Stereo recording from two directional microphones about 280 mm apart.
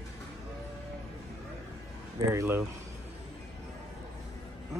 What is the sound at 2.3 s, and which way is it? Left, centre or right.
Speech, centre.